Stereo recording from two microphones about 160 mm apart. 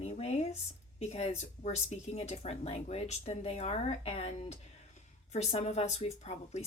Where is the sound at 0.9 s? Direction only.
45° left (ahead or behind).